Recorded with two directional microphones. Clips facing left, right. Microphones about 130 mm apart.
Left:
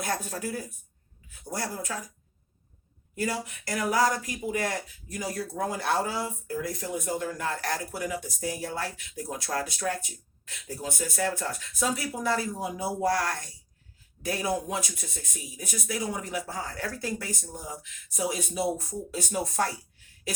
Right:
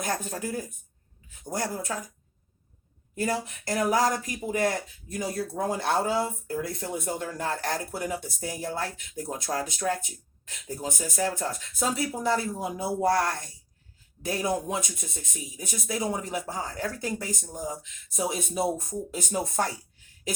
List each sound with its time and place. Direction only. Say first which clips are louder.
0.0 s speech: right 1 dB; 25° right (ahead or behind)
3.2 s speech: right 2 dB; 25° right (ahead or behind)